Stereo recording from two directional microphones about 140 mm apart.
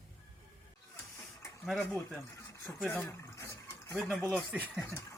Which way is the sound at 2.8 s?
15° left (ahead or behind).